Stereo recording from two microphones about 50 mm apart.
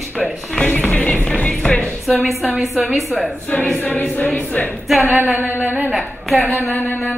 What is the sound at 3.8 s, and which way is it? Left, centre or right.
Choir, left.